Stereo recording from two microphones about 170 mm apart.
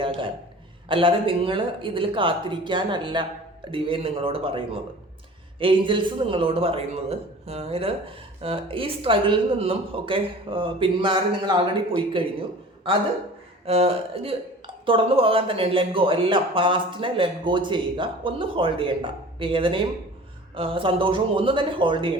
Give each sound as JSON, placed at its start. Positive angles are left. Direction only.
{"t": 0.9, "sound": "speech", "side_deg": -30}
{"t": 13.7, "sound": "speech", "side_deg": -35}